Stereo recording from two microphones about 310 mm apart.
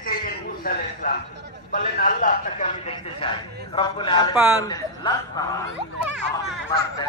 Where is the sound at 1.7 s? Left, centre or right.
Left; by 5.4 s centre.